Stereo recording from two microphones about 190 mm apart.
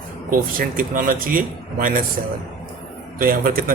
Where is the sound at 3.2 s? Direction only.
50° right (ahead or behind).